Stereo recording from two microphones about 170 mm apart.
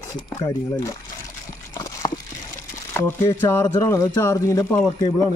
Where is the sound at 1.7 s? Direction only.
20° left (ahead or behind).